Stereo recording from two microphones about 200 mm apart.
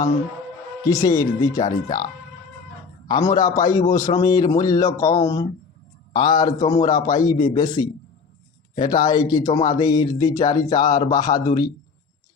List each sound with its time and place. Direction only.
0.9 s speech: 15° left (ahead or behind)
3.1 s speech: 15° left (ahead or behind)